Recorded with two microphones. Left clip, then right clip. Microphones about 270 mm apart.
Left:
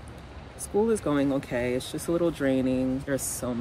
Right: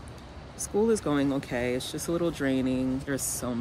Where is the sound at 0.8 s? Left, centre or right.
Centre.